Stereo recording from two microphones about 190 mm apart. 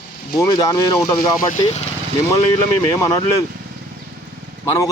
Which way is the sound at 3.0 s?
20° left (ahead or behind).